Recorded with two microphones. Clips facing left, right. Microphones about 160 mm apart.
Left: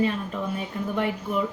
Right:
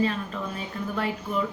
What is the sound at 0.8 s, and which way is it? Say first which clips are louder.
Speech: left 1 dB; 15° left (ahead or behind).